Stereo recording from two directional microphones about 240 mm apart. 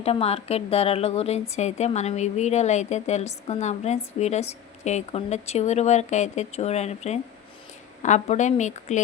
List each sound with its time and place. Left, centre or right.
0.0 s a woman's voice: left